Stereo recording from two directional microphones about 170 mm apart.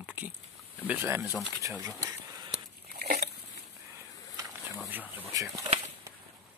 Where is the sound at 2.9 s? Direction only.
65° right (ahead or behind).